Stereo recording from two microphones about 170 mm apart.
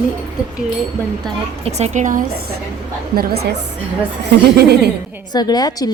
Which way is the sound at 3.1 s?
70° right (ahead or behind).